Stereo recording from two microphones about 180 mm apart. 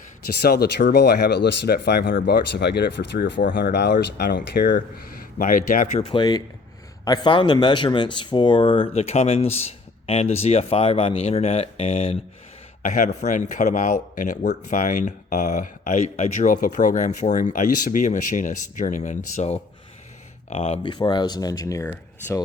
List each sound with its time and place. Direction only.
0.4 s speech: 60° left (ahead or behind)
5.4 s speech: 50° left (ahead or behind)
6.1 s speech: 25° left (ahead or behind)
12.8 s speech: 50° left (ahead or behind); by 22.4 s 15° left (ahead or behind)